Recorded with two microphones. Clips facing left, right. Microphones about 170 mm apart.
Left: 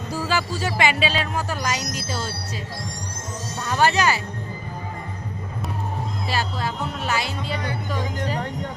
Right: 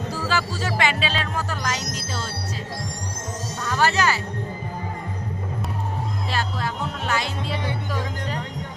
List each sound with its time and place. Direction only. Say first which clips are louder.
0.3 s speech: left 1 dB; 15° left (ahead or behind)
3.6 s speech: left 2 dB; 20° left (ahead or behind)
7.1 s speech: right 1 dB; 5° left (ahead or behind)